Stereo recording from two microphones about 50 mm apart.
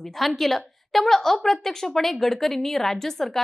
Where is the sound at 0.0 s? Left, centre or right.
Centre.